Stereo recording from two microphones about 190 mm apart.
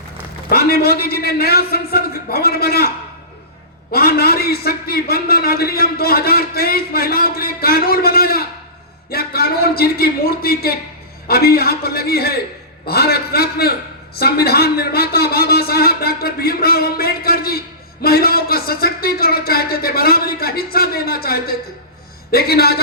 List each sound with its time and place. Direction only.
0.5 s a man's voice: 55° left (ahead or behind)
3.9 s a man's voice: 55° left (ahead or behind)